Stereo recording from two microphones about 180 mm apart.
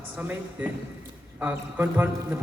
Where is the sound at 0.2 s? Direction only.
10° right (ahead or behind).